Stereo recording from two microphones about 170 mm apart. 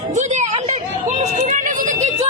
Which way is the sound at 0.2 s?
40° right (ahead or behind).